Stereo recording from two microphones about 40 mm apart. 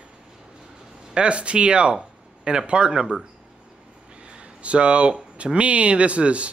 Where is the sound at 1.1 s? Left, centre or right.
Right.